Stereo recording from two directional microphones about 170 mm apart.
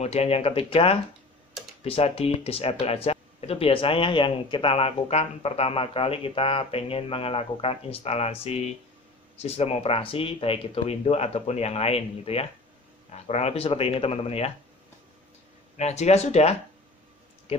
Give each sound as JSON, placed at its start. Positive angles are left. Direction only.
{"t": 0.0, "sound": "speech", "side_deg": 35}
{"t": 15.8, "sound": "speech", "side_deg": 40}